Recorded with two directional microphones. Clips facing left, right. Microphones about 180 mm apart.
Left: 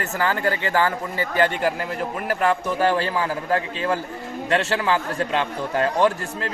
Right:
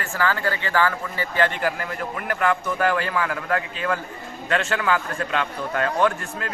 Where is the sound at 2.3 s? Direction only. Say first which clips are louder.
Left 1 dB; 35° left (ahead or behind).